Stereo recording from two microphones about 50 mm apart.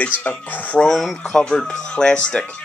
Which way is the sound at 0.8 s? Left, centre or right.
Centre.